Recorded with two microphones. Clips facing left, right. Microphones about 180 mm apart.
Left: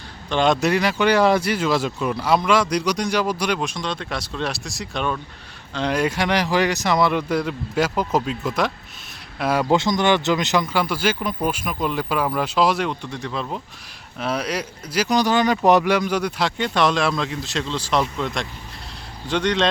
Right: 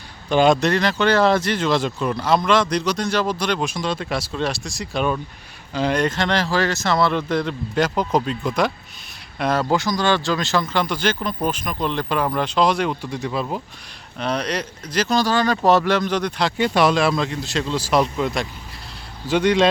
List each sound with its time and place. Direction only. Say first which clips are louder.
0.3 s speech: right 3 dB; 5° right (ahead or behind)
0.6 s speech: even; 10° left (ahead or behind)
3.6 s speech: right 3 dB; 5° right (ahead or behind)
9.7 s speech: left 2 dB; 20° left (ahead or behind); by 13.6 s 10° right (ahead or behind)
14.2 s speech: right 1 dB; 5° left (ahead or behind)
19.3 s speech: right 4 dB; 5° right (ahead or behind)